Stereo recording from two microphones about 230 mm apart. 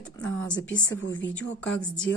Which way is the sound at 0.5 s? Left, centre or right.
Left.